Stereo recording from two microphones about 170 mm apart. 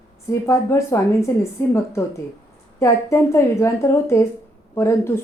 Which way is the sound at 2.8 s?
15° left (ahead or behind).